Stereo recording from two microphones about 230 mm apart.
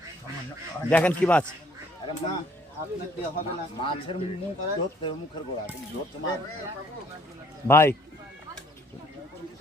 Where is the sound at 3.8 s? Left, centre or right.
Left.